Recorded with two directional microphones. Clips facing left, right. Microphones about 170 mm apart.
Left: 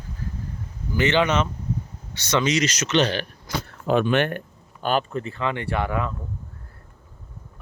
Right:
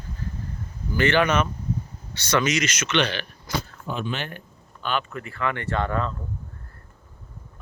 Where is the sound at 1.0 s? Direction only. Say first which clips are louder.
Even; 20° left (ahead or behind); by 3.3 s 40° left (ahead or behind).